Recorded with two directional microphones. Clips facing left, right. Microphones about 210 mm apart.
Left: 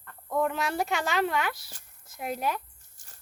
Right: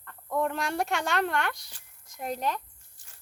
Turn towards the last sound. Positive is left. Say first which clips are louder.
# left 3 dB
turn(degrees=45)  # may be behind; listen again after turning